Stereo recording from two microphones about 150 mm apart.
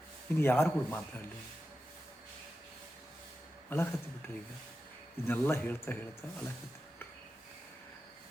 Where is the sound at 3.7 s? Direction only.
15° left (ahead or behind).